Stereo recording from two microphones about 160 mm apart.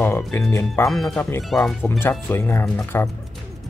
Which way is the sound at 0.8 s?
5° left (ahead or behind).